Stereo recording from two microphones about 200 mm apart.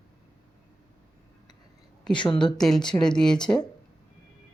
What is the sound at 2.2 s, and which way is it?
Speech, 25° left (ahead or behind).